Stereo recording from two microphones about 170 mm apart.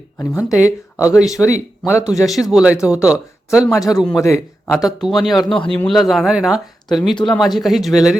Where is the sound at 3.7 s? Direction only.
20° left (ahead or behind).